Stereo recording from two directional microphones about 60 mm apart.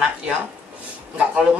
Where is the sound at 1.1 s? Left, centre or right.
Centre.